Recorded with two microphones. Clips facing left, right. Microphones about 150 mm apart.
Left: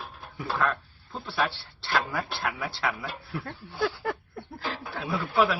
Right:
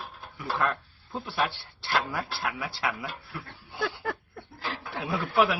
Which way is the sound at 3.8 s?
Centre (ahead or behind).